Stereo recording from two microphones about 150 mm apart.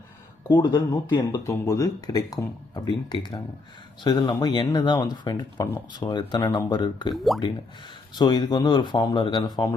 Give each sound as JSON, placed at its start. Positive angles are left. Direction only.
{"t": 0.4, "sound": "speech", "side_deg": 30}
{"t": 1.5, "sound": "speech", "side_deg": 20}
{"t": 7.3, "sound": "speech", "side_deg": 0}
{"t": 8.1, "sound": "speech", "side_deg": 30}